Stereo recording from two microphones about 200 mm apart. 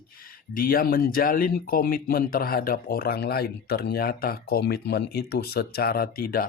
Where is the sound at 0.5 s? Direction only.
45° left (ahead or behind).